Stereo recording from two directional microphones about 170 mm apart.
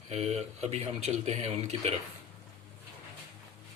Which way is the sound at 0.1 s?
40° right (ahead or behind).